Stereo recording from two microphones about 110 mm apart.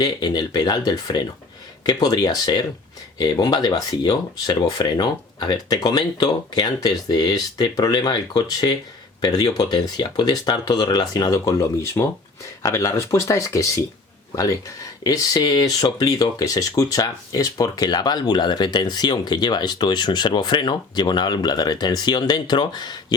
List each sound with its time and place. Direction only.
0.0 s speech: 40° left (ahead or behind)